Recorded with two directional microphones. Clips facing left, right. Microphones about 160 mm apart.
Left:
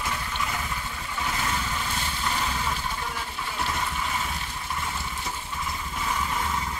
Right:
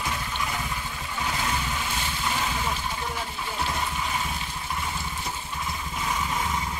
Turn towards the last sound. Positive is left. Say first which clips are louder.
# even
turn(degrees=-10)  # may be behind; listen again after turning